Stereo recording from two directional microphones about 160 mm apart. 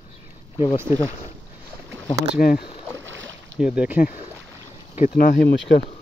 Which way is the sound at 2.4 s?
70° left (ahead or behind).